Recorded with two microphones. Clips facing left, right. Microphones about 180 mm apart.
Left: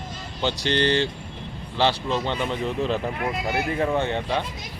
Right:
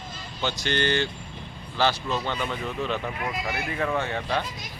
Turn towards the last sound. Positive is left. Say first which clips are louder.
# left 3 dB
turn(degrees=20)  # may be behind; listen again after turning